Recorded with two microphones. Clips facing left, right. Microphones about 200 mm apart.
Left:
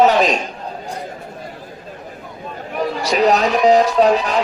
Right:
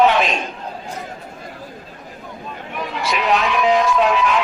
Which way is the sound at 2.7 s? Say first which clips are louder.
Left 5 dB; 40° left (ahead or behind).